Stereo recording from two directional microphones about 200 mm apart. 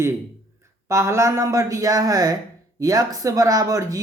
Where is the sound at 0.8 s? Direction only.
15° right (ahead or behind).